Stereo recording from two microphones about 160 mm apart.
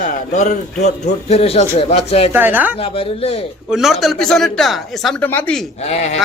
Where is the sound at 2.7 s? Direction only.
35° left (ahead or behind).